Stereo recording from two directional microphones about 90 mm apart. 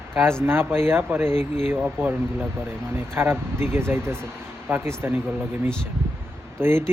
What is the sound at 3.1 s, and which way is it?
Speech, 25° right (ahead or behind).